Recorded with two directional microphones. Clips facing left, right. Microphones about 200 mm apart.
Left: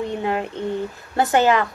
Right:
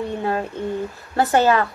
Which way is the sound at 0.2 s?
20° left (ahead or behind).